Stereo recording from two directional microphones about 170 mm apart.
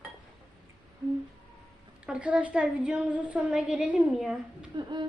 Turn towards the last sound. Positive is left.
turn(degrees=-25)  # may be behind; listen again after turning